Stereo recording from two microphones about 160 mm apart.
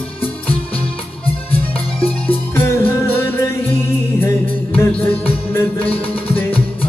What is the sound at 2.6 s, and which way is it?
Music, 15° left (ahead or behind).